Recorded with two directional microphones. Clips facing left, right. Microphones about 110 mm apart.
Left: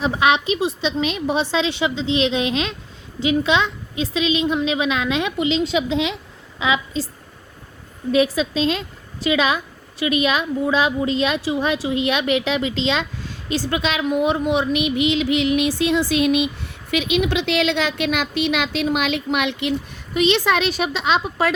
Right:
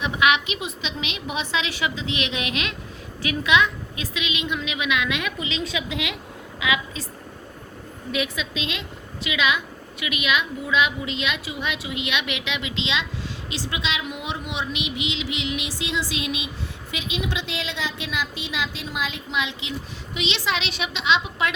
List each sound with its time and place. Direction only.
0.0 s a woman's voice: 35° left (ahead or behind)
8.1 s a woman's voice: 35° left (ahead or behind); by 16.5 s 55° left (ahead or behind)
16.9 s a woman's voice: 70° left (ahead or behind)
20.1 s a woman's voice: 50° left (ahead or behind)